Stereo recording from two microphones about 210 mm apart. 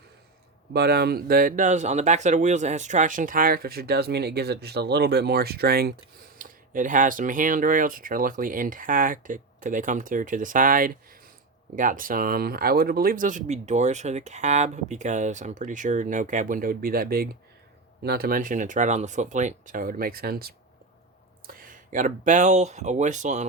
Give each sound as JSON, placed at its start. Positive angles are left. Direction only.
{"t": 0.7, "sound": "speech", "side_deg": -50}